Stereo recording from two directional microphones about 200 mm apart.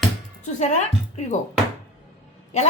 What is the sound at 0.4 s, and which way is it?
Speech, 35° left (ahead or behind).